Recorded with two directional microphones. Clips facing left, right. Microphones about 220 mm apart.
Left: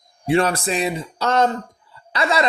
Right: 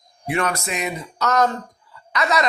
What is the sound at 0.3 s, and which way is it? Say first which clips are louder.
A man's voice: left 5 dB; 30° left (ahead or behind).